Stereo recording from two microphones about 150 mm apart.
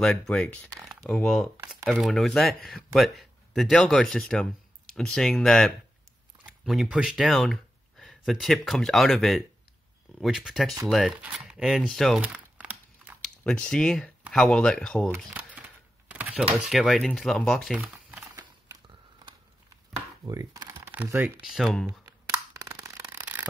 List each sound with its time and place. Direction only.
0.0 s speech: 5° left (ahead or behind)
12.2 s crumpling: 10° right (ahead or behind)
13.2 s speech: 5° left (ahead or behind)
15.0 s speech: 10° right (ahead or behind)
16.1 s a sound: 10° right (ahead or behind)
16.5 s speech: centre (ahead or behind)
17.9 s crumpling: 15° right (ahead or behind)
20.2 s speech: 25° right (ahead or behind)
20.9 s speech: 10° right (ahead or behind)
21.5 s speech: centre (ahead or behind)
22.0 s a sound: 25° right (ahead or behind)